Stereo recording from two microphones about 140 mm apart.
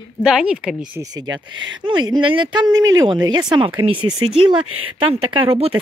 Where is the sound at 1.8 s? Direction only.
30° right (ahead or behind).